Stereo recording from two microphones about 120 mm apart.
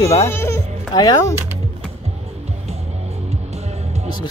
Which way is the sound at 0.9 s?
35° left (ahead or behind).